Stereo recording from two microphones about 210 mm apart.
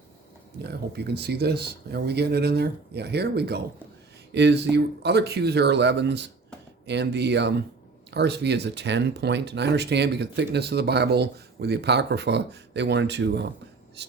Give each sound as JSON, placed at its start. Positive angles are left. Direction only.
{"t": 0.6, "sound": "speech", "side_deg": -50}